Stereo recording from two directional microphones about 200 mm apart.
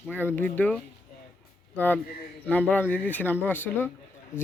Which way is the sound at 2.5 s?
10° left (ahead or behind).